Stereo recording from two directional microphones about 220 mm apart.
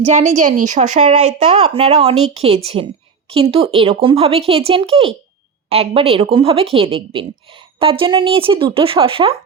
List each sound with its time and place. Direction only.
0.0 s a woman's voice: 30° right (ahead or behind)